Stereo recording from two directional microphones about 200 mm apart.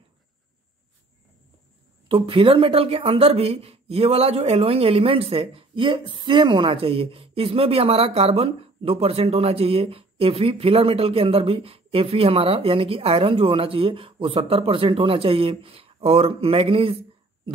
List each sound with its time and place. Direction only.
2.0 s speech: 25° right (ahead or behind)